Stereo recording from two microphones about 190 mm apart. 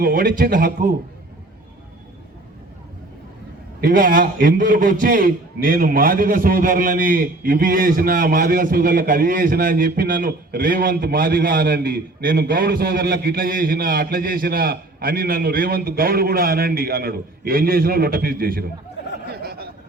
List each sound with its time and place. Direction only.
0.0 s a man's voice: 50° right (ahead or behind)
3.8 s a man's voice: 45° right (ahead or behind)
19.2 s a sound: 55° right (ahead or behind)